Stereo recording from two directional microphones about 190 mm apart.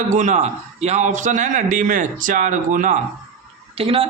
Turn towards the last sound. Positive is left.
turn(degrees=-30)  # may be behind; listen again after turning